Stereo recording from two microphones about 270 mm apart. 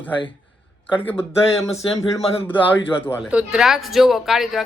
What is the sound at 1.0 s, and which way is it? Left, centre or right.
Speech, centre.